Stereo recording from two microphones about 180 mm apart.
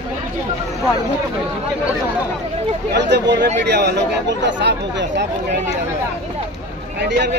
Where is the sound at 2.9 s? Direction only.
70° right (ahead or behind).